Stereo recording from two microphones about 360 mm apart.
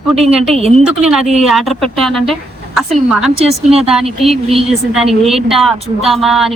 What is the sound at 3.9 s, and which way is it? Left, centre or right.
Speech, centre.